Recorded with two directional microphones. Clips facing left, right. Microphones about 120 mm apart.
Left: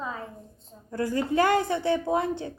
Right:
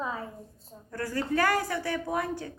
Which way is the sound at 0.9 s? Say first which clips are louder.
Left 4 dB; 20° left (ahead or behind).